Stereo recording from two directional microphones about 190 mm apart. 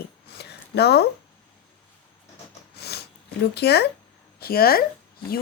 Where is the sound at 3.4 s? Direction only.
60° left (ahead or behind).